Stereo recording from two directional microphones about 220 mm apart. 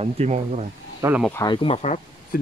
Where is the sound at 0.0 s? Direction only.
30° right (ahead or behind).